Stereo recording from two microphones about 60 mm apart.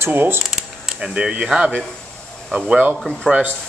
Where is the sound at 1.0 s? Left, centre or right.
Centre.